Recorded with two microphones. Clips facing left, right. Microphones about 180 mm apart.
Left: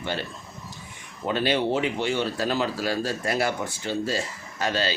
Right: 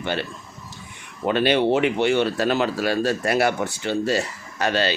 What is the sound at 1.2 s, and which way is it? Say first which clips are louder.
Speech: right 5 dB; 65° right (ahead or behind).